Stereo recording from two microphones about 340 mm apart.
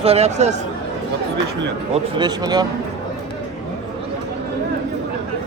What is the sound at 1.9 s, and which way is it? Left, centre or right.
Speech, centre.